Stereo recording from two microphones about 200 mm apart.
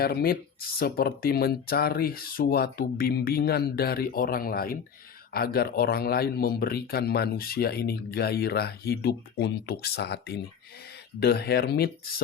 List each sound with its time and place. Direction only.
0.0 s speech: 50° left (ahead or behind)